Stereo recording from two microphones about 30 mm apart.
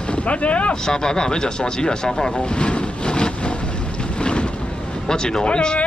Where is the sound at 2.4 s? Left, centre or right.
Left.